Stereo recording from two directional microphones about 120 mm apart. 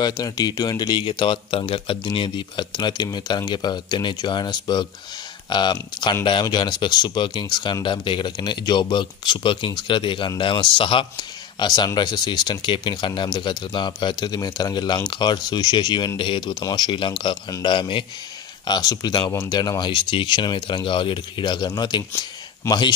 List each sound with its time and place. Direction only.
0.0 s speech: 35° left (ahead or behind)
18.7 s speech: 30° left (ahead or behind)